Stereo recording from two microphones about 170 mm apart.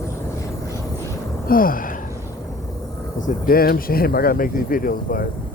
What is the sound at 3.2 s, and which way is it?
Speech, 50° left (ahead or behind).